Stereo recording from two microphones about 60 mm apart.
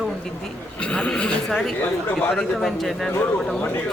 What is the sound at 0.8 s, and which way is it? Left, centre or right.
Speech, centre.